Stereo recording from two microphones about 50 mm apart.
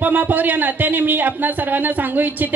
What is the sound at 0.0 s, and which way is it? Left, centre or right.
Speech, right.